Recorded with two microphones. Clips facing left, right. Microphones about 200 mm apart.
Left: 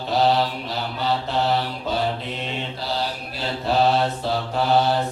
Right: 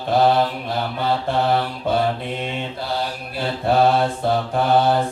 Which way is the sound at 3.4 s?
55° right (ahead or behind).